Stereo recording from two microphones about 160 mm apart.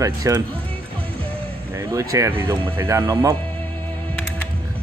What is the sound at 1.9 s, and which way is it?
Speech, 20° right (ahead or behind).